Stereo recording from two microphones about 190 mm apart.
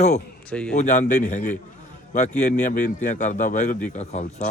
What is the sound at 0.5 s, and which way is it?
Speech, 5° left (ahead or behind).